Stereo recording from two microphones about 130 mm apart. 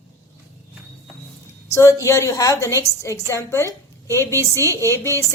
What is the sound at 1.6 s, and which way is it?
A woman's voice, 20° left (ahead or behind).